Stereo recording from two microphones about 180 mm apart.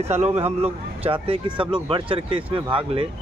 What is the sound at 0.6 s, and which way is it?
Speech, 30° right (ahead or behind).